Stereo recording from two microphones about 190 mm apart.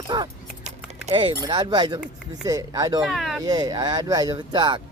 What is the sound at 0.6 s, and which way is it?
Speech, 30° right (ahead or behind).